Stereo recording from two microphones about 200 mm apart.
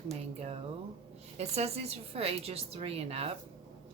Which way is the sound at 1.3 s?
30° right (ahead or behind).